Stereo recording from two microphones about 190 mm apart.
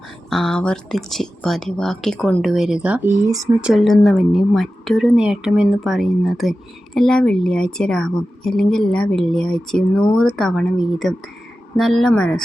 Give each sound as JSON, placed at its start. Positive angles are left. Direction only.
{"t": 0.3, "sound": "speech", "side_deg": 0}
{"t": 3.2, "sound": "speech", "side_deg": -20}
{"t": 3.6, "sound": "speech", "side_deg": 0}